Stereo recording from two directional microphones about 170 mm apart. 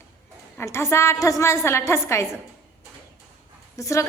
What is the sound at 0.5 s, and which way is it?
A woman's voice, 15° left (ahead or behind).